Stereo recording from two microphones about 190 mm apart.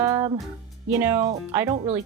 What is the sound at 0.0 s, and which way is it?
Music, 20° right (ahead or behind).